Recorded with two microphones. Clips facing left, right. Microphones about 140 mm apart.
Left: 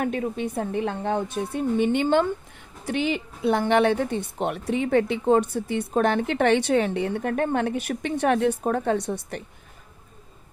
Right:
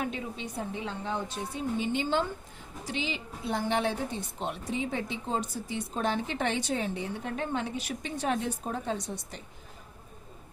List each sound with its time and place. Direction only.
0.0 s a woman's voice: 55° left (ahead or behind)